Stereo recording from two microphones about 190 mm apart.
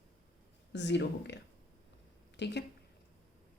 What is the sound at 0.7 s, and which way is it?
A woman's voice, 65° left (ahead or behind).